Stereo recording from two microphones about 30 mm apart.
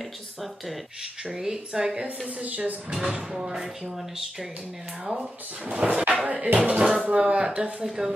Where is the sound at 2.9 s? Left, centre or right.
Right.